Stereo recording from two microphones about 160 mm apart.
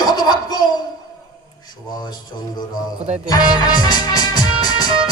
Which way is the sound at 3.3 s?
25° left (ahead or behind).